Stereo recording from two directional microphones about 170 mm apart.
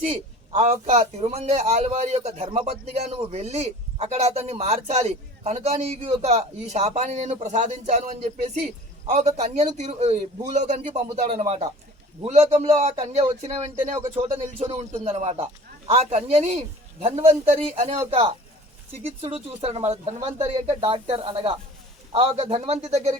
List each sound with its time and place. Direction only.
0.5 s a man's voice: 40° right (ahead or behind)